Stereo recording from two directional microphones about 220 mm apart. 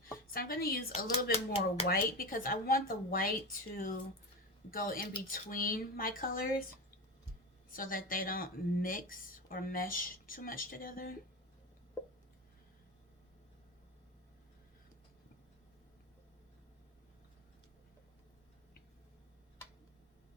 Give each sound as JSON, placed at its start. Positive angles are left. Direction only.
{"t": 0.3, "sound": "speech", "side_deg": 40}
{"t": 0.9, "sound": "speech", "side_deg": 30}
{"t": 1.9, "sound": "speech", "side_deg": 40}
{"t": 7.7, "sound": "speech", "side_deg": 40}